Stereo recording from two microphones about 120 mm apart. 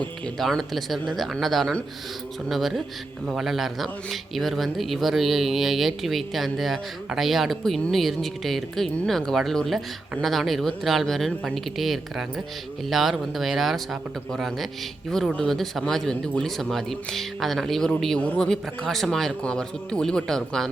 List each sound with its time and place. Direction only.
0.3 s a man's voice: centre (ahead or behind)